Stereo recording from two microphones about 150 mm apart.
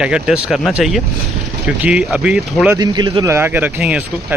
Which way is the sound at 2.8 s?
30° right (ahead or behind).